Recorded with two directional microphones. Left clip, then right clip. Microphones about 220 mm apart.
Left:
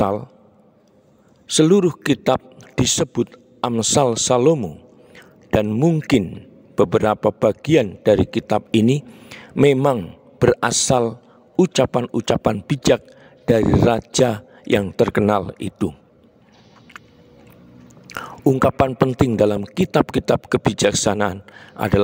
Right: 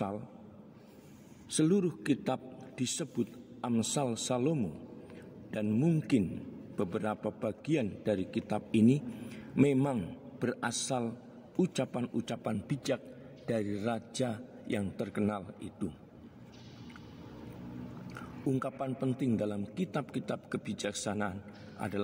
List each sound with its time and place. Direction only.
1.5 s a man's voice: 50° left (ahead or behind)
18.5 s a man's voice: 50° left (ahead or behind)